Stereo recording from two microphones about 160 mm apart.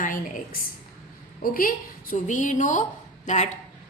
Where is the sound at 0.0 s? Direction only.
55° left (ahead or behind).